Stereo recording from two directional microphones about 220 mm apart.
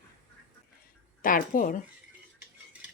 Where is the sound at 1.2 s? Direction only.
40° left (ahead or behind).